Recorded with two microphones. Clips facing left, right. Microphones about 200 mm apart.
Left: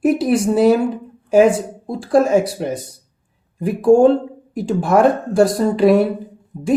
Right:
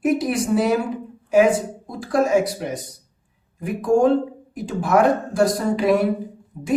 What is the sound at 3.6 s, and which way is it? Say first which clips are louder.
A woman's voice: left 6 dB; 30° left (ahead or behind).